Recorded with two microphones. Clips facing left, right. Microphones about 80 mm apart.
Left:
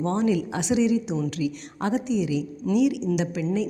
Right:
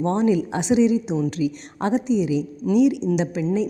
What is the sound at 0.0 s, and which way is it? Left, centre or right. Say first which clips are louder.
A woman's voice: right 4 dB; right.